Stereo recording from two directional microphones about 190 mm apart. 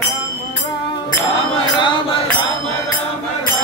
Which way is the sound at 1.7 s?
25° left (ahead or behind).